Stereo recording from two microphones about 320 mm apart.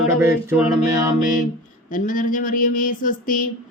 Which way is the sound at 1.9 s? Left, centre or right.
Left.